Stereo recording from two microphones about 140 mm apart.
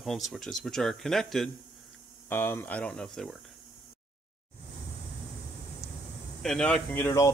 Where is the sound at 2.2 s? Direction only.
15° left (ahead or behind).